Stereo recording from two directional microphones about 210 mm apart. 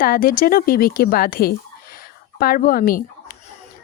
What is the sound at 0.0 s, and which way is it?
Speech, 45° left (ahead or behind).